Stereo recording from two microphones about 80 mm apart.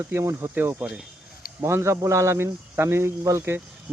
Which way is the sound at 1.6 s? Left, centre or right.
Right.